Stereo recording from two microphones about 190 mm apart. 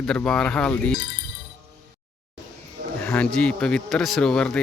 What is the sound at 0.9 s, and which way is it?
Music, 50° left (ahead or behind).